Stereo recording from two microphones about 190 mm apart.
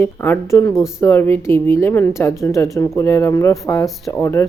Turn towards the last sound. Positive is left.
turn(degrees=15)  # may be behind; listen again after turning